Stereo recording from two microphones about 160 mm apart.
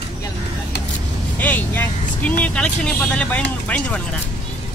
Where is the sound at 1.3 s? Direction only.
10° left (ahead or behind).